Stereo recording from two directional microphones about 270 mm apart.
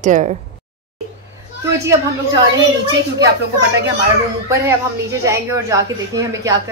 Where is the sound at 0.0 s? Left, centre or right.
Right.